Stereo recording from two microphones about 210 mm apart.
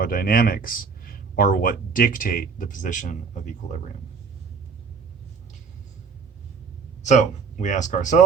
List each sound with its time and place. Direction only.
0.0 s speech: 45° left (ahead or behind)
7.0 s speech: 35° left (ahead or behind)